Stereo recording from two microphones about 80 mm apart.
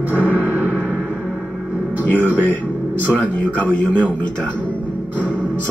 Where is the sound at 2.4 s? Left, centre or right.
Left.